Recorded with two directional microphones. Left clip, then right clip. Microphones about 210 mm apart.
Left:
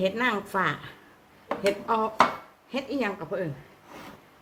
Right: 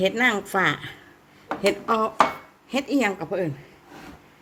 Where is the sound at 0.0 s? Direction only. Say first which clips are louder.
Right 5 dB; 30° right (ahead or behind).